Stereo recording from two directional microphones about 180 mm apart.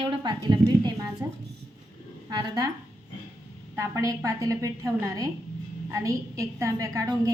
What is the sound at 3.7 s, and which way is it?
A woman's voice, 15° right (ahead or behind).